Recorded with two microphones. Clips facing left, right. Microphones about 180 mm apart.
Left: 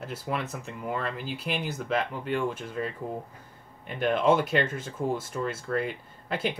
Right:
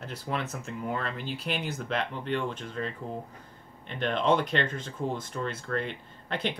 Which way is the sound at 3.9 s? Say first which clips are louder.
Left 3 dB; 10° left (ahead or behind).